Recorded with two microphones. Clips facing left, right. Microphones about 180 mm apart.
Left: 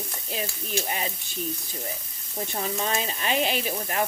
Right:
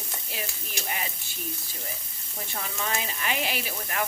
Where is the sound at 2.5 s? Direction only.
30° left (ahead or behind).